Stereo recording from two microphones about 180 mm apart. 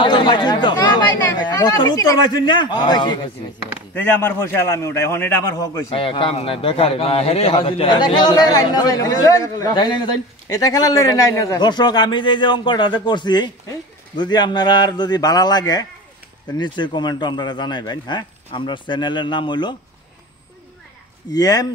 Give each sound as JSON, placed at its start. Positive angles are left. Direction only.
{"t": 0.0, "sound": "speech", "side_deg": 25}
{"t": 3.9, "sound": "a man's voice", "side_deg": 10}
{"t": 5.9, "sound": "a man's voice", "side_deg": 30}
{"t": 21.3, "sound": "a man's voice", "side_deg": 20}